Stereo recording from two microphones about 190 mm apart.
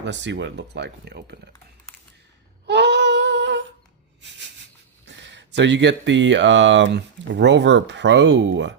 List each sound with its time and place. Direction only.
0.0 s speech: 70° right (ahead or behind)
2.6 s a sound: 65° right (ahead or behind)
4.2 s speech: 65° right (ahead or behind)